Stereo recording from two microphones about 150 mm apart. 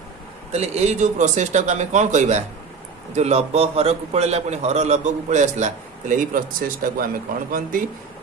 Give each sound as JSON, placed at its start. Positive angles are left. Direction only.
{"t": 0.5, "sound": "a man's voice", "side_deg": -45}